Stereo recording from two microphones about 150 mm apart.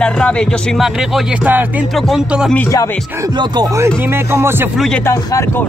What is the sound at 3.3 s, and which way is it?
Music, 25° right (ahead or behind).